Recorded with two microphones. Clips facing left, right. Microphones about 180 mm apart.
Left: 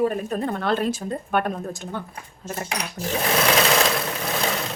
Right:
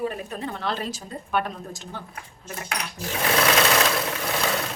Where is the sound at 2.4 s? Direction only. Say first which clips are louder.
Left 6 dB; 40° left (ahead or behind).